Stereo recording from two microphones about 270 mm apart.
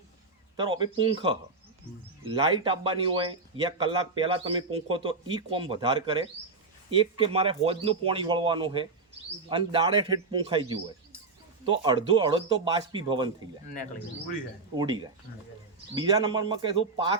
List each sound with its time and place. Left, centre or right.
0.5 s a man's voice: centre
16.0 s a man's voice: centre